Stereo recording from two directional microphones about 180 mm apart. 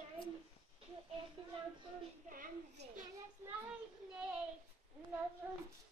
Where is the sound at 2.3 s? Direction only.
50° right (ahead or behind).